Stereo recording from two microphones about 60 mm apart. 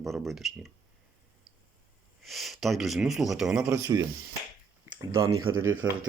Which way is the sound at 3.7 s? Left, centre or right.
Right.